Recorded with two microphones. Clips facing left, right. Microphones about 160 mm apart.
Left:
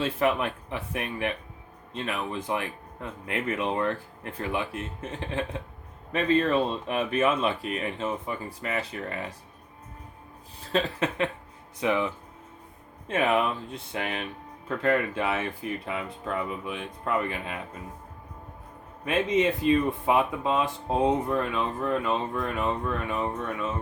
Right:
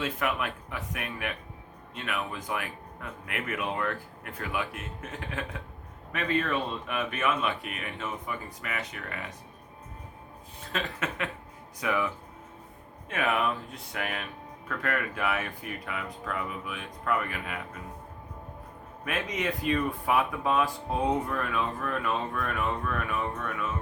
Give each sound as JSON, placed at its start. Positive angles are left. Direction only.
{"t": 0.0, "sound": "speech", "side_deg": 30}
{"t": 10.6, "sound": "speech", "side_deg": 30}
{"t": 19.0, "sound": "speech", "side_deg": 25}